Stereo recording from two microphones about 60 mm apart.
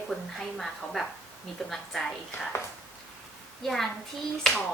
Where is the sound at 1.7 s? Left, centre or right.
Centre.